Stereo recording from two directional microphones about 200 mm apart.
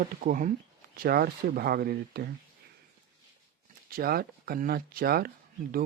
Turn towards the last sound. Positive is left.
turn(degrees=-50)  # may be behind; listen again after turning